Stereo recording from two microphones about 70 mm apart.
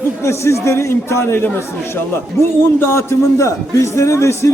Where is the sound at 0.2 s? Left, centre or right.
Left.